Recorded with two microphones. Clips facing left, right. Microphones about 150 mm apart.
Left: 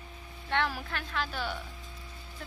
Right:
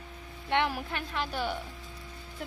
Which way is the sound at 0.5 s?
20° right (ahead or behind).